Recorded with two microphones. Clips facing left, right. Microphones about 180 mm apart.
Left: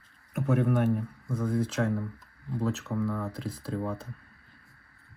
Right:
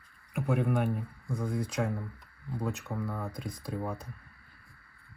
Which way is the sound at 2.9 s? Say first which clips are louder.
Left 5 dB; 15° right (ahead or behind).